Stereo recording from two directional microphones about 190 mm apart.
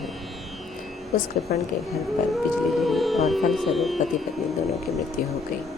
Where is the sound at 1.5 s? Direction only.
50° left (ahead or behind).